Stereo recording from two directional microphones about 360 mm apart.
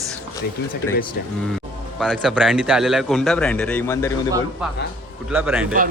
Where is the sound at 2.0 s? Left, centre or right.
Centre.